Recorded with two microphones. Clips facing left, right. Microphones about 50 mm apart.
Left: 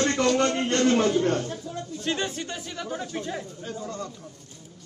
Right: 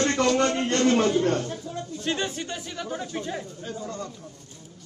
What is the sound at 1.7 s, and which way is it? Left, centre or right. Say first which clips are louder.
Music: right 1 dB; centre.